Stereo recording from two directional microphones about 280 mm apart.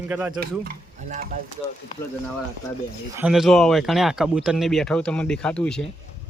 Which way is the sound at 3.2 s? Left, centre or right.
Centre.